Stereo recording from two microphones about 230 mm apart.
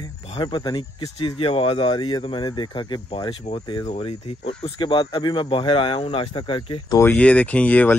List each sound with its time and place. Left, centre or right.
0.4 s speech: centre